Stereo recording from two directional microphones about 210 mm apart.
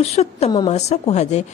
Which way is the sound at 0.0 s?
30° left (ahead or behind).